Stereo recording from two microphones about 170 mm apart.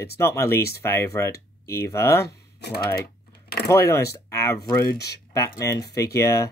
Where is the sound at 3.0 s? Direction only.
65° left (ahead or behind).